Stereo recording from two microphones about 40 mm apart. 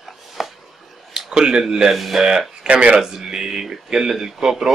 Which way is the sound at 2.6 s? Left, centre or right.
Right.